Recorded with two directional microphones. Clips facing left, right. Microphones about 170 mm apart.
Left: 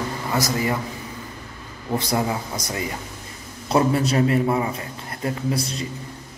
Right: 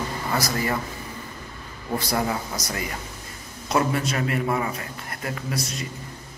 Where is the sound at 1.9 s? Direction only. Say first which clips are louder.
Left 2 dB; 20° left (ahead or behind).